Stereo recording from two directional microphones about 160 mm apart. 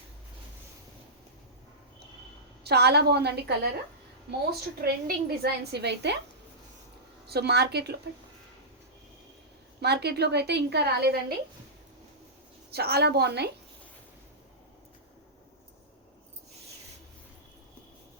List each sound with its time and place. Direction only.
2.6 s a woman's voice: 90° right
4.8 s a woman's voice: 75° right (ahead or behind); by 6.1 s 90° right
7.3 s a woman's voice: 90° right
9.8 s a woman's voice: 90° right
12.7 s a woman's voice: 85° right